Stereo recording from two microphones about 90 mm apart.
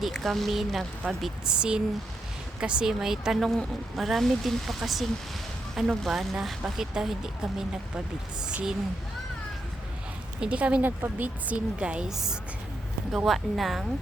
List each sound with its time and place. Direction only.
0.0 s a woman's voice: centre (ahead or behind)
10.4 s a woman's voice: 15° right (ahead or behind)